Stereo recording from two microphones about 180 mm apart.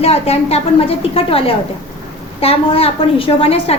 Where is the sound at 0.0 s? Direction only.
35° left (ahead or behind).